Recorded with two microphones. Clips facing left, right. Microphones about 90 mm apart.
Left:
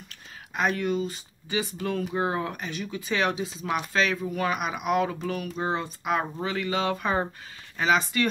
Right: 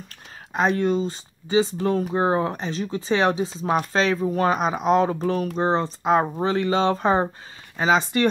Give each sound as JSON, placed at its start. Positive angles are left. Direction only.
{"t": 0.5, "sound": "speech", "side_deg": -30}